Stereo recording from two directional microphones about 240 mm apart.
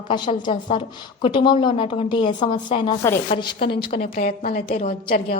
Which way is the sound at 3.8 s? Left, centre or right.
Left.